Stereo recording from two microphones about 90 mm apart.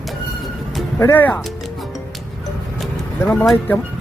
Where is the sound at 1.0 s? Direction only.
25° left (ahead or behind).